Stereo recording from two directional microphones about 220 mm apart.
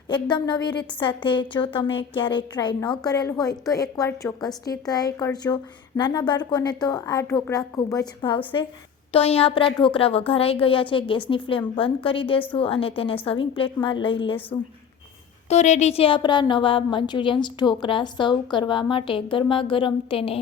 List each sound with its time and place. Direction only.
0.1 s a woman's voice: 20° left (ahead or behind)
15.4 s a woman's voice: 30° left (ahead or behind)